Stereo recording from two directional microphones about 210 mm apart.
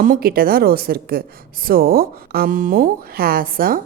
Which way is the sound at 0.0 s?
45° right (ahead or behind).